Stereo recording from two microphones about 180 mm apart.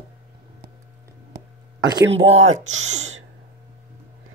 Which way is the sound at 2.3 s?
40° right (ahead or behind).